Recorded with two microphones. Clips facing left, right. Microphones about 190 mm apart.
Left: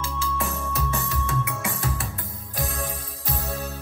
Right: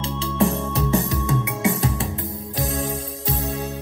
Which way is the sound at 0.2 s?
25° right (ahead or behind).